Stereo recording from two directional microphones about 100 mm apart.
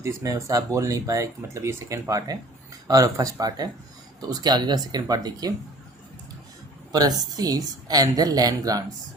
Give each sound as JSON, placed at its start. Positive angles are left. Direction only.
{"t": 0.0, "sound": "speech", "side_deg": -30}
{"t": 6.9, "sound": "speech", "side_deg": -40}